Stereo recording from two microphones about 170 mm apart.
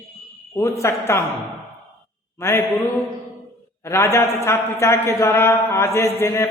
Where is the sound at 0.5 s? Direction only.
15° left (ahead or behind).